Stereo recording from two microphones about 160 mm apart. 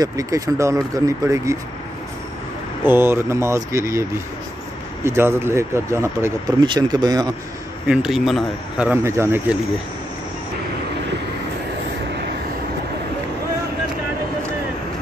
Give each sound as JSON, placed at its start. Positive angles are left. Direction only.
{"t": 0.0, "sound": "speech", "side_deg": -20}
{"t": 2.8, "sound": "speech", "side_deg": -15}
{"t": 5.0, "sound": "speech", "side_deg": -15}
{"t": 6.6, "sound": "speech", "side_deg": -25}
{"t": 7.9, "sound": "speech", "side_deg": -5}